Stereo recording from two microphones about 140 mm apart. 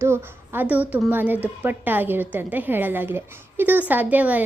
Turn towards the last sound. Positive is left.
turn(degrees=-10)  # may be behind; listen again after turning